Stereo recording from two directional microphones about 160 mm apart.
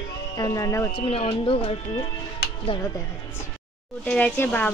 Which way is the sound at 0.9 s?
35° left (ahead or behind).